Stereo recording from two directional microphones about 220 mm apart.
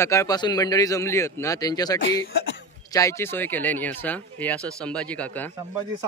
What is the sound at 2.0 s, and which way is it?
Speech, 60° left (ahead or behind).